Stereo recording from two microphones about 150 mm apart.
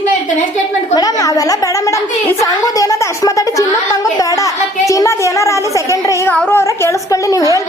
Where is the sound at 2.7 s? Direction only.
20° left (ahead or behind).